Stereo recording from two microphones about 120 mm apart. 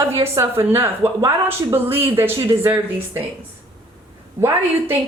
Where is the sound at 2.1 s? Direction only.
20° right (ahead or behind).